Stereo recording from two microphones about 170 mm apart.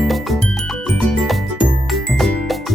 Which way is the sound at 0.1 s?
Centre (ahead or behind).